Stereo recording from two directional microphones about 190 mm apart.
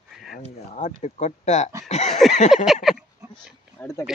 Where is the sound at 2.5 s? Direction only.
Centre (ahead or behind).